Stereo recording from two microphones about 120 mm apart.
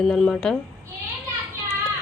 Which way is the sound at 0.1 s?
5° left (ahead or behind).